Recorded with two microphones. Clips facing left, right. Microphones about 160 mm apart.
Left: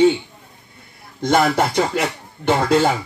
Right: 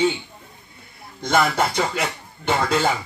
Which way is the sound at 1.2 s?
40° left (ahead or behind).